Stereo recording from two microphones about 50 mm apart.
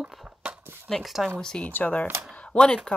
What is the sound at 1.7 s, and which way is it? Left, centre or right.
Speech, left.